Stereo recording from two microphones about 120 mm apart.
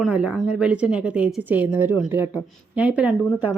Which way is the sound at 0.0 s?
10° right (ahead or behind).